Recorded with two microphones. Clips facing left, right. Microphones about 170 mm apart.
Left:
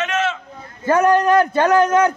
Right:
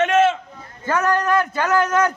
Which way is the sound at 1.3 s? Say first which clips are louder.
Left 5 dB; 35° left (ahead or behind).